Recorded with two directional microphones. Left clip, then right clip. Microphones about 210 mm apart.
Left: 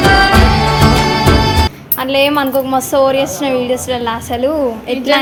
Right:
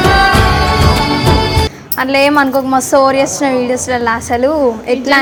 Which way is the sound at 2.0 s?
15° right (ahead or behind).